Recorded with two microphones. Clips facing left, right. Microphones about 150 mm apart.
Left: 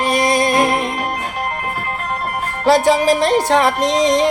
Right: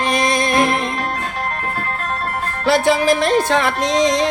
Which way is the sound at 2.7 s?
40° left (ahead or behind).